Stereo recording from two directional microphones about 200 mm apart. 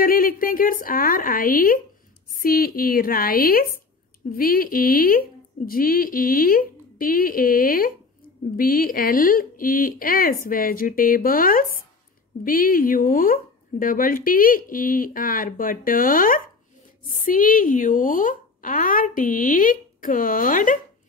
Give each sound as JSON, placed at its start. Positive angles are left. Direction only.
{"t": 0.0, "sound": "speech", "side_deg": 45}